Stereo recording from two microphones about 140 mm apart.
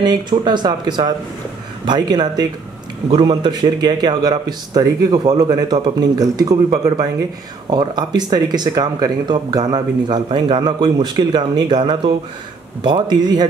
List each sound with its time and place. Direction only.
0.0 s speech: 30° right (ahead or behind)